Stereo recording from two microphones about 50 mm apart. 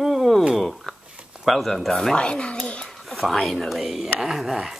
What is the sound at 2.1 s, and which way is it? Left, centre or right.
Speech, centre.